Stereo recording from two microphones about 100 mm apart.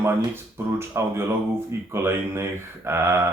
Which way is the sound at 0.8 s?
25° right (ahead or behind).